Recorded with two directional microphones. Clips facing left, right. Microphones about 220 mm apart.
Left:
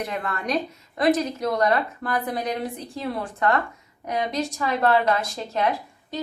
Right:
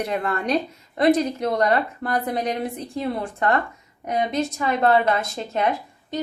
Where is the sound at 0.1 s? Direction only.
30° right (ahead or behind).